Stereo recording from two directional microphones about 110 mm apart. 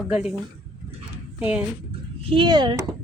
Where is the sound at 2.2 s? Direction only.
55° right (ahead or behind).